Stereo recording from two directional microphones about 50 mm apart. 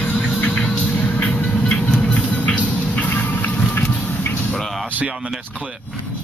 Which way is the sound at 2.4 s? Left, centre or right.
Left.